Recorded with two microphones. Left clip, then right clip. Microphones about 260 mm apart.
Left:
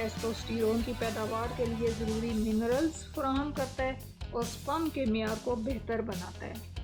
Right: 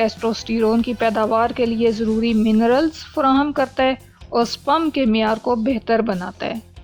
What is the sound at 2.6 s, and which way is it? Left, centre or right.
A woman's voice, right.